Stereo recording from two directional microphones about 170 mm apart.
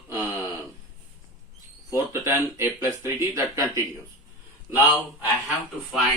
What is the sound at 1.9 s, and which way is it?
Speech, 15° right (ahead or behind).